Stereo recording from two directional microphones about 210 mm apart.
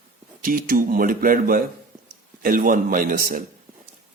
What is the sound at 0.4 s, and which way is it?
Speech, 40° right (ahead or behind).